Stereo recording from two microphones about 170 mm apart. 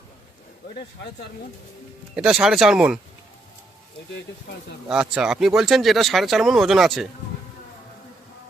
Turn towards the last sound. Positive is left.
turn(degrees=0)  # may be behind; listen again after turning